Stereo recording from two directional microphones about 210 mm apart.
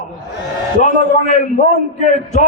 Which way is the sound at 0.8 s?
35° left (ahead or behind).